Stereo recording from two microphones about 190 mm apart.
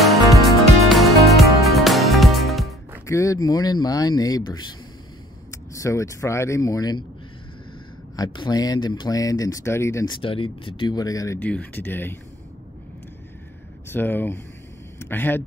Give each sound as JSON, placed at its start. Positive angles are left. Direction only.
{"t": 0.0, "sound": "music", "side_deg": 0}
{"t": 3.1, "sound": "speech", "side_deg": 15}
{"t": 8.2, "sound": "speech", "side_deg": 25}
{"t": 10.2, "sound": "speech", "side_deg": 30}
{"t": 13.8, "sound": "speech", "side_deg": 10}